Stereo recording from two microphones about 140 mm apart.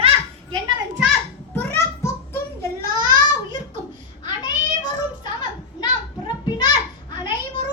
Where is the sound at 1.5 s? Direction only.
15° left (ahead or behind).